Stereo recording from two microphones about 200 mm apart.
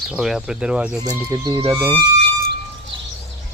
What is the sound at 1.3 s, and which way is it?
Speech, 20° right (ahead or behind).